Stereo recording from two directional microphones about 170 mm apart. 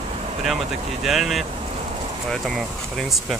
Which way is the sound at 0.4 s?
Centre (ahead or behind).